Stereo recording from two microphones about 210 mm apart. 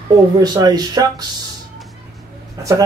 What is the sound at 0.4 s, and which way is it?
Speech, 20° right (ahead or behind).